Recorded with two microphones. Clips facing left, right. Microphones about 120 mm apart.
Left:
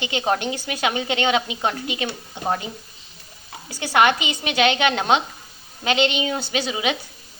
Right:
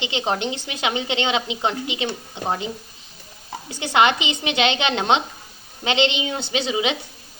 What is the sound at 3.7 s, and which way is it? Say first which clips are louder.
A woman's voice: even; 20° right (ahead or behind).